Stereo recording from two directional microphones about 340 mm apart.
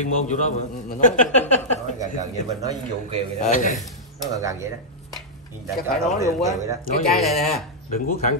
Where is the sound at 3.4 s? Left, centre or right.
Left.